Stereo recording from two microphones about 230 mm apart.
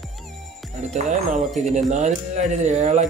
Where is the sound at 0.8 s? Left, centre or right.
Right.